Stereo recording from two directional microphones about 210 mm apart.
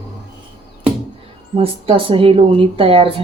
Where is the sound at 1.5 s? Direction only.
25° right (ahead or behind).